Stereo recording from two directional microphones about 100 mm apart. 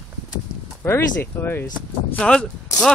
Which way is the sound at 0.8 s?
25° left (ahead or behind).